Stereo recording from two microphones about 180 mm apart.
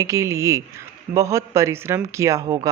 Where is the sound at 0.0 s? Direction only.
15° right (ahead or behind).